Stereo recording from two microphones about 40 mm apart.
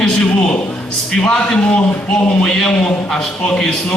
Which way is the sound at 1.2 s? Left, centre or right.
Left.